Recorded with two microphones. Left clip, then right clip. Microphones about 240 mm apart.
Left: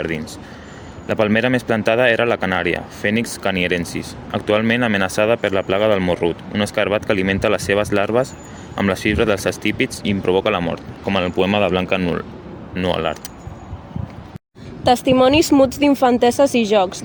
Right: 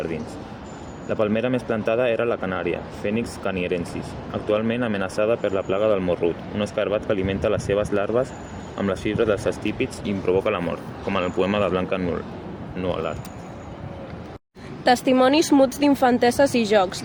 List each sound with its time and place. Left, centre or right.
1.0 s speech: left
14.8 s speech: left